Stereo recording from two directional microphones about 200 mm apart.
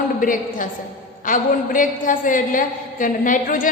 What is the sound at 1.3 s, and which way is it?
A woman's voice, 40° left (ahead or behind).